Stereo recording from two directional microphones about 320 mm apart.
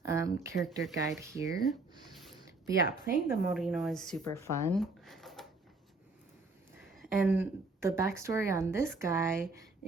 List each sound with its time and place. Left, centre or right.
0.0 s speech: centre
2.8 s speech: left
3.2 s speech: centre
7.0 s speech: centre